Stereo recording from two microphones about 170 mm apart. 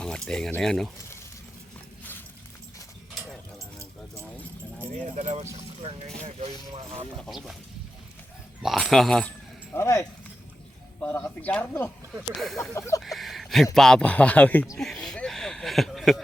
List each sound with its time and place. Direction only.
0.0 s speech: 5° left (ahead or behind)
4.2 s a sound: 10° left (ahead or behind)
5.1 s speech: 45° right (ahead or behind)
7.2 s speech: centre (ahead or behind)
8.6 s speech: centre (ahead or behind)
9.7 s speech: 15° left (ahead or behind)
13.0 s a sound: centre (ahead or behind)
13.7 s speech: 5° left (ahead or behind)
14.8 s a sound: centre (ahead or behind)